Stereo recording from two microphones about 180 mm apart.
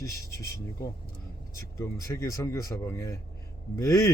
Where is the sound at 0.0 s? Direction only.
15° left (ahead or behind).